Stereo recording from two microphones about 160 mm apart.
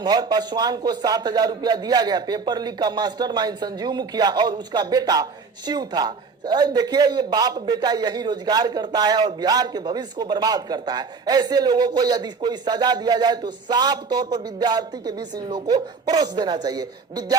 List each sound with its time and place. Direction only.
0.0 s a man's voice: 25° right (ahead or behind)